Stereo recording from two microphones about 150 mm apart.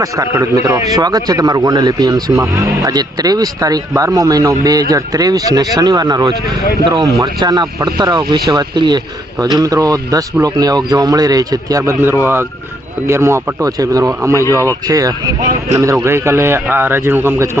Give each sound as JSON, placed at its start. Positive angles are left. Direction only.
{"t": 0.0, "sound": "speech", "side_deg": -20}
{"t": 14.4, "sound": "speech", "side_deg": 20}
{"t": 14.8, "sound": "speech", "side_deg": -25}